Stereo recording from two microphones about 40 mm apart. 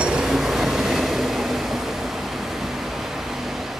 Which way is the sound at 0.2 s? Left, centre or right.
Centre.